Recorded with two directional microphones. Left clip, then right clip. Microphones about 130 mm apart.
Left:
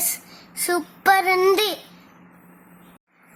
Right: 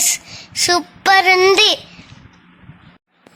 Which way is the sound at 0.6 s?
20° right (ahead or behind).